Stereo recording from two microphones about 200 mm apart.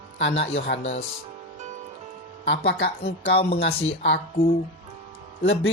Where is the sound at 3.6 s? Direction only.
65° left (ahead or behind).